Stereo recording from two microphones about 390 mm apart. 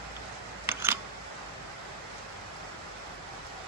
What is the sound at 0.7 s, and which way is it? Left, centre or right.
Camera, centre.